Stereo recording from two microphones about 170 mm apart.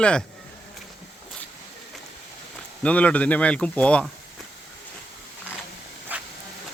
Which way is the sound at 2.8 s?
10° left (ahead or behind).